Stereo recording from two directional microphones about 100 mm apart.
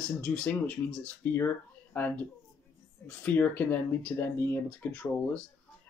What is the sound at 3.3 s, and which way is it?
Speech, 15° left (ahead or behind).